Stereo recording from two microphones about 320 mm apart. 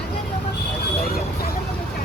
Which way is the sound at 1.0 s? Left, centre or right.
Left.